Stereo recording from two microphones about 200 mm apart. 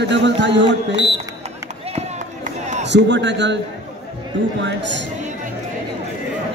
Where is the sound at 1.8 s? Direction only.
35° right (ahead or behind).